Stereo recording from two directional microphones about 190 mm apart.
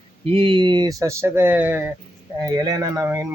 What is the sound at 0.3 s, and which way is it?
Speech, 30° right (ahead or behind).